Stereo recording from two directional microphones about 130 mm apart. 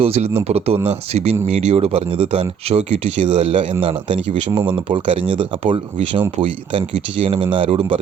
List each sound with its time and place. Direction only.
0.0 s speech: 50° right (ahead or behind)
4.5 s speech: 20° right (ahead or behind)
4.9 s speech: 40° right (ahead or behind)